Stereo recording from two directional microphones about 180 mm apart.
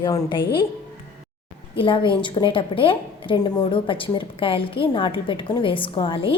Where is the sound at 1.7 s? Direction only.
30° left (ahead or behind).